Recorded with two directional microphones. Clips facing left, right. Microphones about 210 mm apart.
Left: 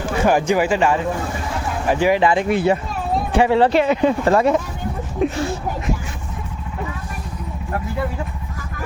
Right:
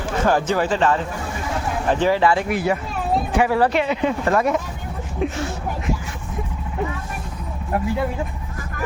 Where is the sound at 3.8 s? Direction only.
45° left (ahead or behind).